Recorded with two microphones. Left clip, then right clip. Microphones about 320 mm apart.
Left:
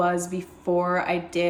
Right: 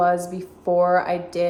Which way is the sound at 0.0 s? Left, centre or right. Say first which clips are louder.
Right 4 dB; centre.